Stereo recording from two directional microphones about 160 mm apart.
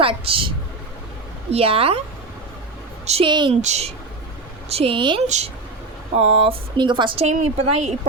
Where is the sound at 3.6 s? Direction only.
45° right (ahead or behind).